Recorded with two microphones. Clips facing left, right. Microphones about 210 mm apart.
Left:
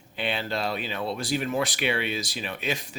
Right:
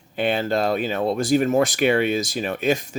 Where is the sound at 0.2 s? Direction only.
45° right (ahead or behind).